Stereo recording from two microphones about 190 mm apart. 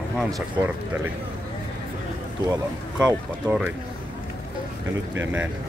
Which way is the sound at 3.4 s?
10° right (ahead or behind).